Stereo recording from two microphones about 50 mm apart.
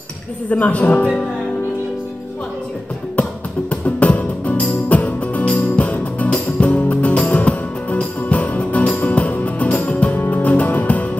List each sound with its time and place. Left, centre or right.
0.5 s a woman's voice: left
3.8 s music: left